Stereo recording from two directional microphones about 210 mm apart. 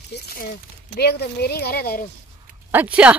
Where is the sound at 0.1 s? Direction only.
50° left (ahead or behind).